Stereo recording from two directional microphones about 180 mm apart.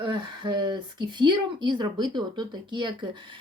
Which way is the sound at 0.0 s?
25° right (ahead or behind).